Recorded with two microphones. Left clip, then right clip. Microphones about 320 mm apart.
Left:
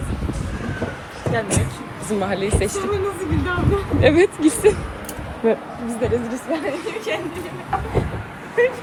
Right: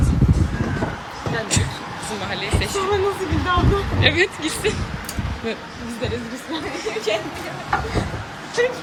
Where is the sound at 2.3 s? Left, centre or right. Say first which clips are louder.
Left 2 dB; centre.